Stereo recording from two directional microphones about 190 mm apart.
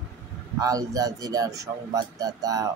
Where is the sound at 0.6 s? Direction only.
20° right (ahead or behind).